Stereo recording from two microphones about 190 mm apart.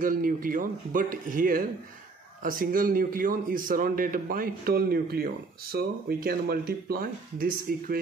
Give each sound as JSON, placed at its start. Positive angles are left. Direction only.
{"t": 0.0, "sound": "a man's voice", "side_deg": -45}